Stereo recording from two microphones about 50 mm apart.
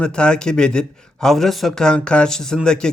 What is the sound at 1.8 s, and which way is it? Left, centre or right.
A man's voice, centre.